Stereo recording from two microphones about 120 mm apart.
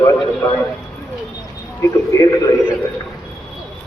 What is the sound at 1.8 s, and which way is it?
Speech, 25° left (ahead or behind).